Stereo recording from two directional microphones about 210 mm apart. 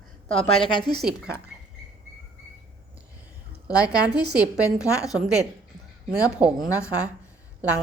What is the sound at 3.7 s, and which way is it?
Speech, 15° left (ahead or behind).